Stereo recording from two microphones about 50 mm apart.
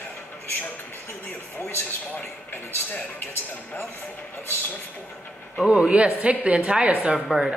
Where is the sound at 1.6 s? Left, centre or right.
Left.